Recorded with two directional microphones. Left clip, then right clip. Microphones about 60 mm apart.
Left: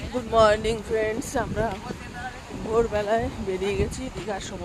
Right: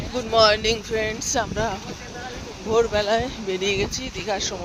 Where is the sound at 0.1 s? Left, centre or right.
Left.